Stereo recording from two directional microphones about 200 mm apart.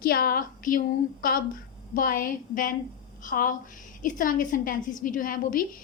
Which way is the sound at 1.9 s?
45° left (ahead or behind).